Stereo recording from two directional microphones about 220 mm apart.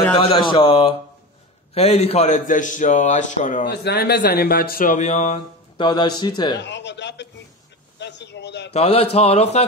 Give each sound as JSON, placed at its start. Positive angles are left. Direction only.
{"t": 0.2, "sound": "speech", "side_deg": 25}
{"t": 3.6, "sound": "speech", "side_deg": 50}
{"t": 6.6, "sound": "a man's voice", "side_deg": 55}
{"t": 8.7, "sound": "speech", "side_deg": 30}